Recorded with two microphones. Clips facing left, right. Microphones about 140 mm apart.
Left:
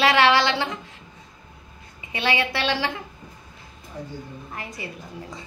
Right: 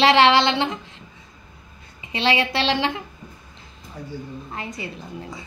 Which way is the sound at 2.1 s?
25° right (ahead or behind).